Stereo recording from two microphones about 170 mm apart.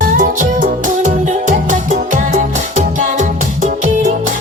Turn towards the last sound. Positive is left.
turn(degrees=-50)  # may be behind; listen again after turning